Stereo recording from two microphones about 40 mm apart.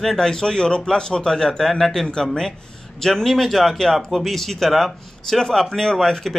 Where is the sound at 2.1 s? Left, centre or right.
Centre.